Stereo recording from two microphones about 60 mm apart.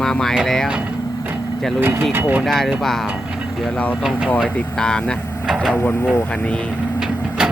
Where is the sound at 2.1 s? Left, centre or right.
Right.